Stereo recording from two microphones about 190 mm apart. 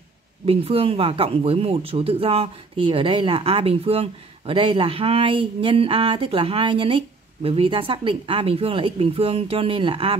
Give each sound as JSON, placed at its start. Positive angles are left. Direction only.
{"t": 0.5, "sound": "speech", "side_deg": -30}